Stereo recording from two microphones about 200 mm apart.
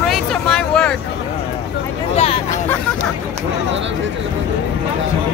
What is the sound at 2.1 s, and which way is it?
Hubbub, 30° left (ahead or behind).